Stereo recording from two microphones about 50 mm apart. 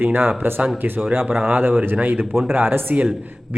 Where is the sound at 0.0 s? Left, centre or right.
Right.